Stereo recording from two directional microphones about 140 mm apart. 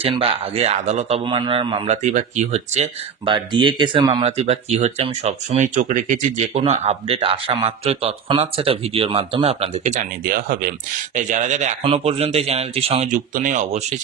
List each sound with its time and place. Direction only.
0.0 s speech: 40° right (ahead or behind)
2.1 s speech: 55° right (ahead or behind)
3.3 s speech: 35° right (ahead or behind); by 10.7 s 90° right
11.1 s speech: 65° right (ahead or behind)
11.8 s speech: 45° right (ahead or behind)
13.1 s speech: 65° right (ahead or behind)